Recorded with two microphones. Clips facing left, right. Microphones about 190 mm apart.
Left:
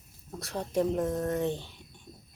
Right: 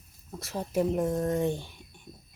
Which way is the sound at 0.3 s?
Centre (ahead or behind).